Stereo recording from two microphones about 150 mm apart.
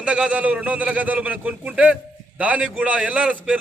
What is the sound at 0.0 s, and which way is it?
A man's voice, 5° right (ahead or behind).